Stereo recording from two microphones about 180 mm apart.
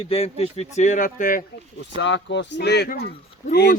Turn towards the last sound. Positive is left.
turn(degrees=60)  # may be behind; listen again after turning